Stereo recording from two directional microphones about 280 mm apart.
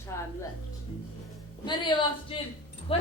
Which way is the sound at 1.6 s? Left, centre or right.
Centre.